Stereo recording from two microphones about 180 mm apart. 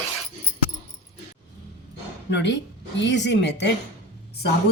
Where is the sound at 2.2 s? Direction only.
80° left.